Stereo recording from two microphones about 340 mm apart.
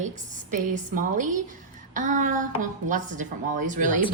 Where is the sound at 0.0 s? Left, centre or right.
Right.